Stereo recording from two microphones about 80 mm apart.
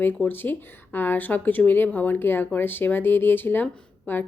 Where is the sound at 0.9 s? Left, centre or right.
Left.